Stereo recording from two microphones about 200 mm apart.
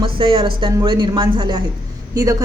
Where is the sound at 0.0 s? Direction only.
25° right (ahead or behind).